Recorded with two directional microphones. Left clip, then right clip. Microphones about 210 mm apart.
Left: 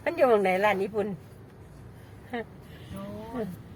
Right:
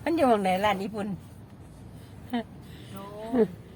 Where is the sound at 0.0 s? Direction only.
15° right (ahead or behind).